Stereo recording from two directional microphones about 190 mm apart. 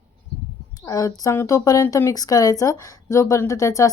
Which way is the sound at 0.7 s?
15° left (ahead or behind).